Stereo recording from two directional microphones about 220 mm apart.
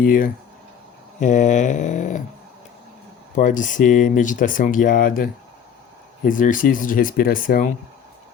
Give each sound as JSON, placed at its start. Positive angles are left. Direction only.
{"t": 0.0, "sound": "speech", "side_deg": 40}
{"t": 3.3, "sound": "speech", "side_deg": 35}